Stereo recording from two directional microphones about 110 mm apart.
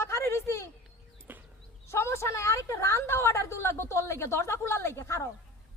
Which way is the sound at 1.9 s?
25° left (ahead or behind).